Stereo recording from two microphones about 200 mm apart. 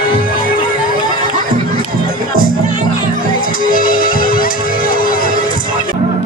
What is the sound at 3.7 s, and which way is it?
Music, 45° left (ahead or behind).